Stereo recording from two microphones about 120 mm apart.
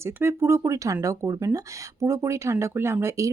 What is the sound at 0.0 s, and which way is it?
Speech, 20° right (ahead or behind).